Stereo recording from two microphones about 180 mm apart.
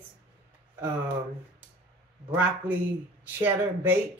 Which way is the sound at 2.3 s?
10° right (ahead or behind).